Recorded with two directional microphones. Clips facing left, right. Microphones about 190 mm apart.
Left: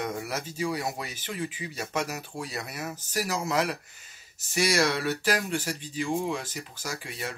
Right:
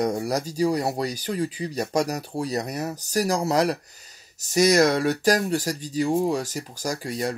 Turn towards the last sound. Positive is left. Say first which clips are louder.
# right 9 dB
turn(degrees=-40)  # may be behind; listen again after turning